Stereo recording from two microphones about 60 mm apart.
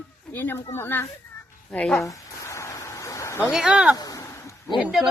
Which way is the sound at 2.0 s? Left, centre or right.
Left.